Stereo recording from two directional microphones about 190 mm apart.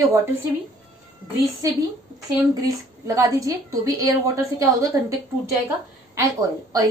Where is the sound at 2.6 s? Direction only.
20° right (ahead or behind).